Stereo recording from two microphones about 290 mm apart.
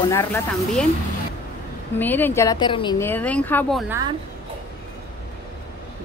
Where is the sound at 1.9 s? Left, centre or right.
Centre.